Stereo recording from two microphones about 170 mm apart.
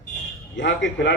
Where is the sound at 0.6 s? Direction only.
90° left.